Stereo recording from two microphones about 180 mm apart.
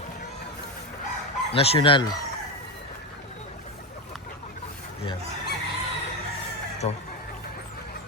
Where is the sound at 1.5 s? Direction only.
30° left (ahead or behind).